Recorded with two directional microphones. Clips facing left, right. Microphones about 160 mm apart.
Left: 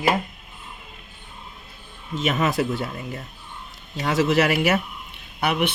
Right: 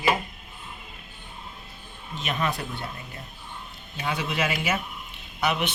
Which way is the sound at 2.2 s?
90° left.